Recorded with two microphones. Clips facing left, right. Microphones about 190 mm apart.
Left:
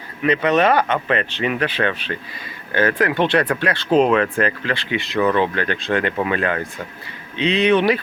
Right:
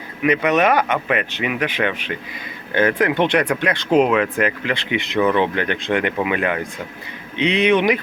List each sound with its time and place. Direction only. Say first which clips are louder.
0.2 s speech: even; 10° right (ahead or behind)